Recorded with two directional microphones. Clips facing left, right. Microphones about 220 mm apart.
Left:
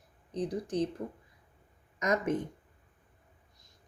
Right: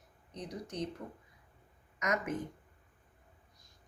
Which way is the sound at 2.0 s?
30° left (ahead or behind).